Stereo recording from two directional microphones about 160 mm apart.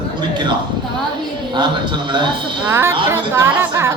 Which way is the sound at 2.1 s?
30° right (ahead or behind).